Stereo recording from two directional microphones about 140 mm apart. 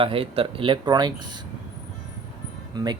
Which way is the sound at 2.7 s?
30° right (ahead or behind).